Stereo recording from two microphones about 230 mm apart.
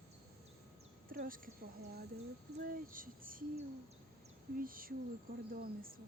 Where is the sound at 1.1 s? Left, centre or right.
Right.